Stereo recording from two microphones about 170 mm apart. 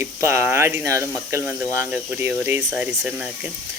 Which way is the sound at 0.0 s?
15° right (ahead or behind).